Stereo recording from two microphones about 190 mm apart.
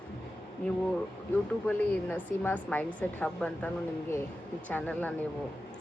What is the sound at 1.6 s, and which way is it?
A woman's voice, 10° left (ahead or behind).